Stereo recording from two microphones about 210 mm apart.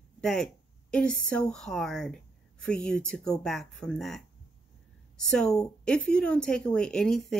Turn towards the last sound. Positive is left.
turn(degrees=0)  # may be behind; listen again after turning